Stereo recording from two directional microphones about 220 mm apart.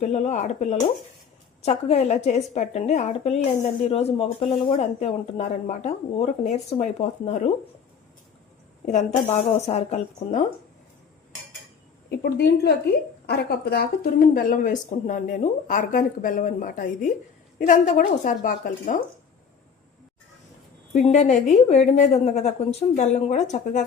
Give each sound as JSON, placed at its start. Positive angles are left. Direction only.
{"t": 0.0, "sound": "a woman's voice", "side_deg": 30}
{"t": 8.9, "sound": "speech", "side_deg": 30}
{"t": 12.0, "sound": "speech", "side_deg": 50}
{"t": 20.9, "sound": "a woman's voice", "side_deg": 30}